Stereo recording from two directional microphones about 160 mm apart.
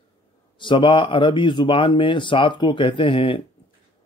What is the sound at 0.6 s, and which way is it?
Speech, 30° left (ahead or behind).